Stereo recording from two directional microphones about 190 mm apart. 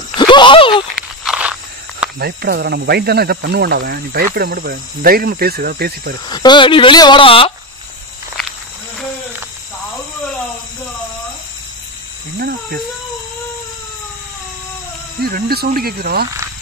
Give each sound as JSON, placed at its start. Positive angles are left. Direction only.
{"t": 0.1, "sound": "a sound", "side_deg": 25}
{"t": 1.2, "sound": "walk", "side_deg": -5}
{"t": 2.1, "sound": "speech", "side_deg": -55}
{"t": 6.2, "sound": "speech", "side_deg": 25}
{"t": 15.2, "sound": "speech", "side_deg": -55}